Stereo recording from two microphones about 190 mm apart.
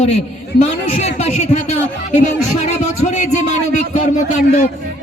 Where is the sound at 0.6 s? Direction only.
35° left (ahead or behind).